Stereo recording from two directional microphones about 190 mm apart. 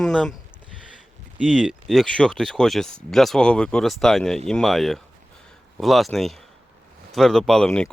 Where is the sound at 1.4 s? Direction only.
Centre (ahead or behind).